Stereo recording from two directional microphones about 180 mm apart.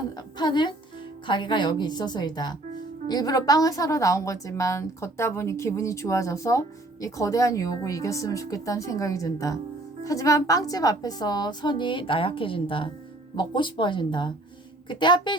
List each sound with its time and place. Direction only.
0.3 s music: 25° left (ahead or behind)
1.3 s a woman's voice: 25° left (ahead or behind)